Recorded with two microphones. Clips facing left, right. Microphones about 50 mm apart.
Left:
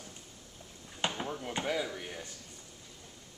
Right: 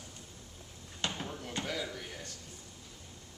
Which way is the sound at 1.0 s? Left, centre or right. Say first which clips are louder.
Left 3 dB; centre.